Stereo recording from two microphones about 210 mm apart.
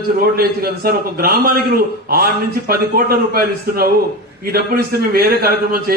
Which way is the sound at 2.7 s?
45° right (ahead or behind).